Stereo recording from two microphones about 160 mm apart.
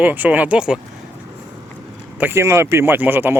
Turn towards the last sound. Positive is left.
turn(degrees=-15)  # may be behind; listen again after turning